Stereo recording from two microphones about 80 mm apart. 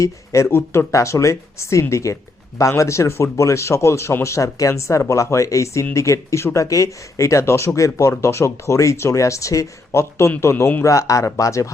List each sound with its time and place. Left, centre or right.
0.0 s speech: left